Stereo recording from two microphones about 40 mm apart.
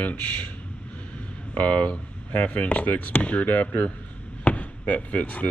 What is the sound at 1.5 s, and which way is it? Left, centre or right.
Speech, left.